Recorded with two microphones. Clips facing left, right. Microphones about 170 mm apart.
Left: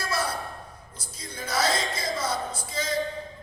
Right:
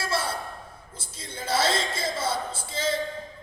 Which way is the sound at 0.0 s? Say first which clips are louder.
Right 1 dB; 25° right (ahead or behind).